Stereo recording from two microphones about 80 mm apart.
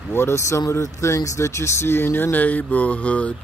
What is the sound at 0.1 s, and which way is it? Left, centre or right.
Speech, left.